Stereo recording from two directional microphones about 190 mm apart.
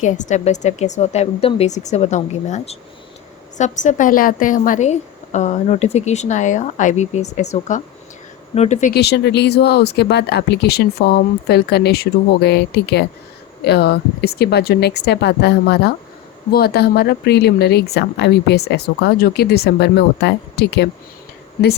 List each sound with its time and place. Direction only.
0.0 s a woman's voice: 40° left (ahead or behind)
8.9 s speech: 60° left (ahead or behind)